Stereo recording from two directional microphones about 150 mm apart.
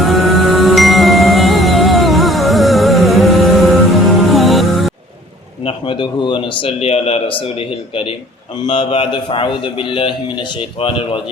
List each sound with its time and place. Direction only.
0.0 s music: centre (ahead or behind)
5.6 s a man's voice: 35° left (ahead or behind)